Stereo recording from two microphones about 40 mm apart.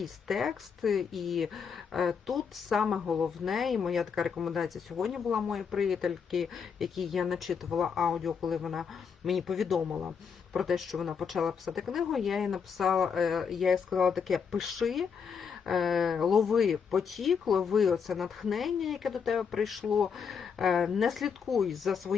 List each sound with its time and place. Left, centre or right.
0.0 s speech: centre